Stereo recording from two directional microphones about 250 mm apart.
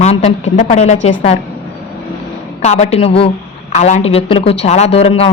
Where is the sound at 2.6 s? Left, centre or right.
Left.